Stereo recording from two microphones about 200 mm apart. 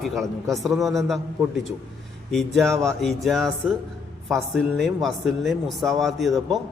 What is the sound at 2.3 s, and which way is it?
A man's voice, centre (ahead or behind).